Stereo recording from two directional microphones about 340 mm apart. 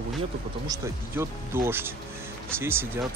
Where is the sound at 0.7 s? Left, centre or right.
Centre.